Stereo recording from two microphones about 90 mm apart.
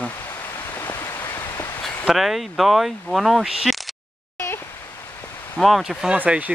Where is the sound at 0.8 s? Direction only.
25° left (ahead or behind).